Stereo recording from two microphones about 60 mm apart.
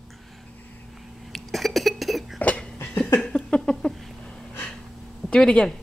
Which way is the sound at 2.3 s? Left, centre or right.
Left.